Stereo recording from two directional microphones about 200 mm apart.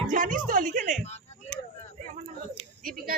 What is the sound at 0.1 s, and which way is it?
Speech, 40° right (ahead or behind).